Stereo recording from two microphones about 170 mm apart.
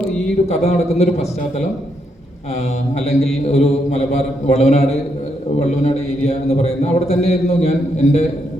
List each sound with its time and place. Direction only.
0.4 s a man's voice: 40° left (ahead or behind)
3.5 s a man's voice: 40° left (ahead or behind)